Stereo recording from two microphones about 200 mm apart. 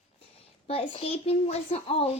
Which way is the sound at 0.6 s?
30° left (ahead or behind).